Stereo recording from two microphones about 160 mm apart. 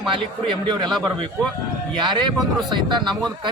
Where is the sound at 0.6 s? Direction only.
30° right (ahead or behind).